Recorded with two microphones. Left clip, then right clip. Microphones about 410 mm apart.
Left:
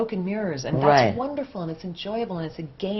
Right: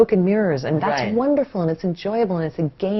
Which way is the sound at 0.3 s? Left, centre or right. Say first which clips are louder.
Right 8 dB; right.